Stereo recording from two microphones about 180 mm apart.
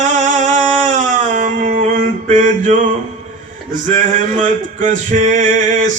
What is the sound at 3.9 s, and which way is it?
Male singing, 45° right (ahead or behind).